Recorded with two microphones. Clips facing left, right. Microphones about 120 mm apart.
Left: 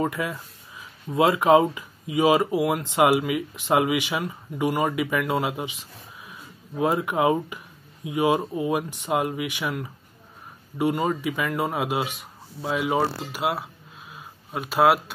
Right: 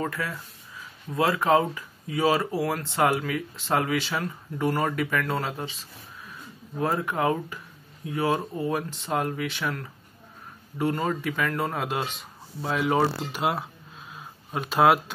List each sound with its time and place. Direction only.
0.0 s speech: 15° left (ahead or behind)